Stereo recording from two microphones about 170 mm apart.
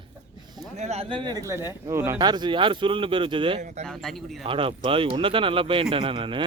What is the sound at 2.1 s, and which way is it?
Speech, 25° right (ahead or behind).